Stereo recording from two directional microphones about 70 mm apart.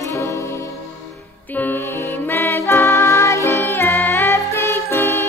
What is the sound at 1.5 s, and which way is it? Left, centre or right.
Music, left.